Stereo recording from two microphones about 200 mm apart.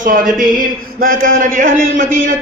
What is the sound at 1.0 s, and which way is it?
A man's voice, 40° right (ahead or behind).